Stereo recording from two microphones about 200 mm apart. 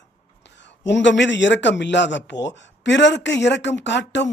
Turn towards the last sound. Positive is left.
turn(degrees=60)  # may be behind; listen again after turning